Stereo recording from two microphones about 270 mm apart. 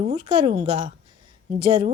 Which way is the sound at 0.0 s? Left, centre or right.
Centre.